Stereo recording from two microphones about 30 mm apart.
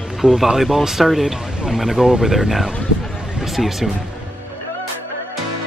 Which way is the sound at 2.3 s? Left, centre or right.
Centre.